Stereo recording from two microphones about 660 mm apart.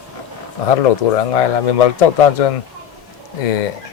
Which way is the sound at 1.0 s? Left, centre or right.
Left.